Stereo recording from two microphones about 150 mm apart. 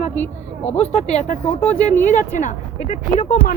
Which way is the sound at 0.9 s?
45° left (ahead or behind).